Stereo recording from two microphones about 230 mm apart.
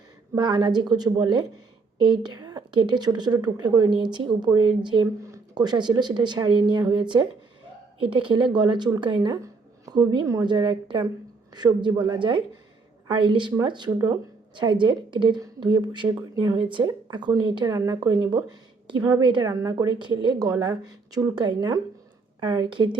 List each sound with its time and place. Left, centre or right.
0.3 s a woman's voice: centre